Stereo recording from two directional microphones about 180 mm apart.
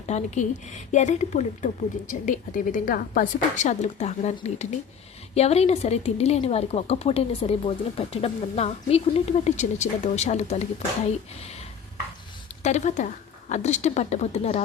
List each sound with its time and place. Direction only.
0.1 s a woman's voice: 40° left (ahead or behind)
12.6 s a woman's voice: 40° left (ahead or behind)